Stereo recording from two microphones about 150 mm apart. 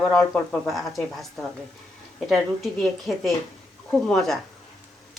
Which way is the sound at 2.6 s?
Centre (ahead or behind).